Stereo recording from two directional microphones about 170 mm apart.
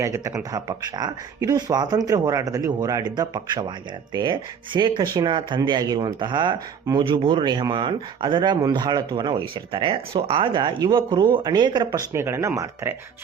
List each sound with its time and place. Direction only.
0.0 s speech: 20° right (ahead or behind)